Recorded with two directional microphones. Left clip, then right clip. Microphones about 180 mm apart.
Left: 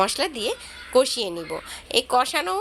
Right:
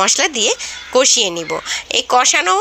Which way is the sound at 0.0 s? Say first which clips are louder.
Right 8 dB; 15° right (ahead or behind).